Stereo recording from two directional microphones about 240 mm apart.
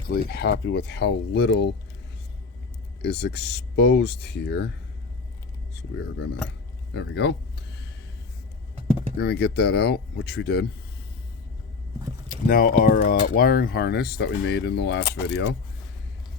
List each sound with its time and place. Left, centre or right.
0.1 s speech: left
3.0 s speech: left
6.9 s speech: left
9.1 s speech: left
12.5 s speech: left